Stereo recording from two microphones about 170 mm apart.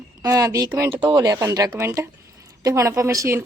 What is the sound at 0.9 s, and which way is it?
Speech, 30° right (ahead or behind).